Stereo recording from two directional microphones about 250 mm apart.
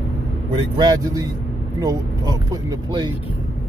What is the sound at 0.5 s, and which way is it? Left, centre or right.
Speech, centre.